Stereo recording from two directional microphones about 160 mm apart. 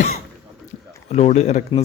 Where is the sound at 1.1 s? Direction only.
45° left (ahead or behind).